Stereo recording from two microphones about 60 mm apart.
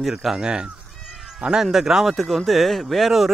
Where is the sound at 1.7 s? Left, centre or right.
Centre.